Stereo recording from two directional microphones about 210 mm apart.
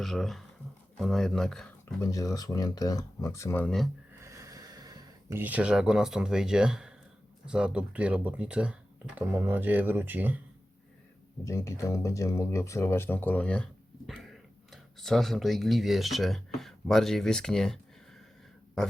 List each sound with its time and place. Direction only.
0.0 s speech: centre (ahead or behind)
2.0 s speech: 15° left (ahead or behind)
4.2 s a sound: 15° right (ahead or behind)
7.4 s speech: 5° right (ahead or behind)
11.4 s speech: 15° left (ahead or behind)
18.8 s a man's voice: centre (ahead or behind)